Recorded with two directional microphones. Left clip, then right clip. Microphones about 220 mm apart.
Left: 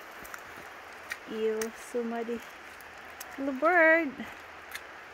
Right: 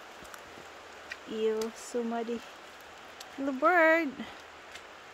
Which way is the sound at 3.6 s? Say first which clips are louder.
Left 1 dB; centre (ahead or behind).